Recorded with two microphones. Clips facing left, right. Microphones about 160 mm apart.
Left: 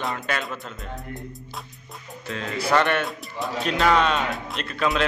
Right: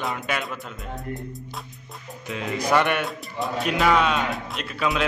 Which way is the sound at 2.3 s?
15° right (ahead or behind).